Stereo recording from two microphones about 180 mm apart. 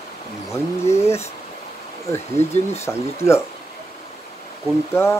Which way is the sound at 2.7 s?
15° left (ahead or behind).